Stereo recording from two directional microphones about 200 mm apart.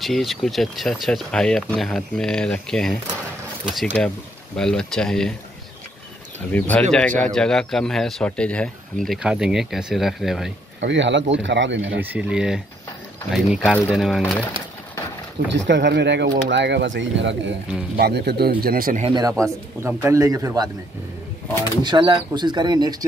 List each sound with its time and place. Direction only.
0.0 s speech: centre (ahead or behind)
6.5 s speech: 10° left (ahead or behind)
10.8 s speech: 65° right (ahead or behind)
12.0 s speech: 10° right (ahead or behind)
15.5 s speech: 60° right (ahead or behind); by 19.0 s 45° right (ahead or behind)
19.0 s speech: 20° right (ahead or behind)
21.8 s speech: 25° right (ahead or behind)